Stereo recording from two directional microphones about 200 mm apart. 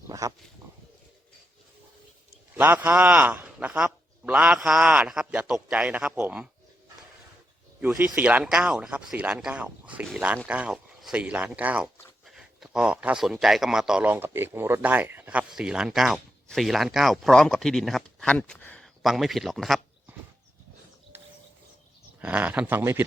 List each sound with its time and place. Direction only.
0.1 s a sound: 15° right (ahead or behind)
2.6 s speech: 10° right (ahead or behind)
7.8 s speech: 10° right (ahead or behind)
21.1 s bird: 10° right (ahead or behind)
22.2 s speech: 5° right (ahead or behind)